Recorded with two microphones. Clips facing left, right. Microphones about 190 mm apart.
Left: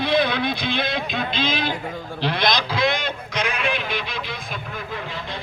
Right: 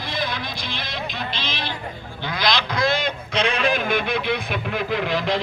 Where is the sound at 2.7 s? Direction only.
25° left (ahead or behind).